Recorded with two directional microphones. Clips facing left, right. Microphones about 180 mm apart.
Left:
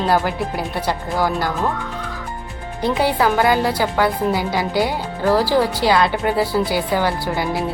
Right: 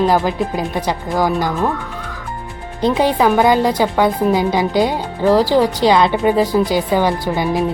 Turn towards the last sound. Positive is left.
turn(degrees=-20)  # may be behind; listen again after turning